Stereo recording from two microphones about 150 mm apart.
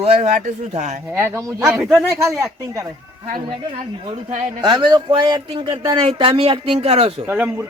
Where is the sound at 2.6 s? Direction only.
20° right (ahead or behind).